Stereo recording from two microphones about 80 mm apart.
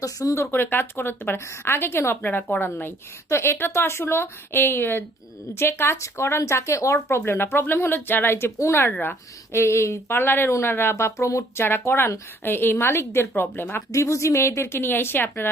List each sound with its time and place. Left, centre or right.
0.0 s speech: left
0.5 s a woman's voice: left
7.2 s a woman's voice: left
8.9 s a woman's voice: left
11.6 s a woman's voice: left
13.9 s speech: left